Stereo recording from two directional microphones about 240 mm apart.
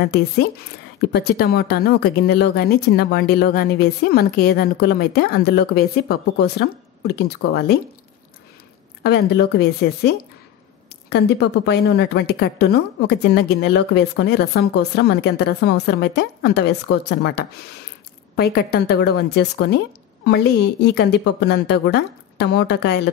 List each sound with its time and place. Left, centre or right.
0.0 s speech: left
9.0 s a woman's voice: left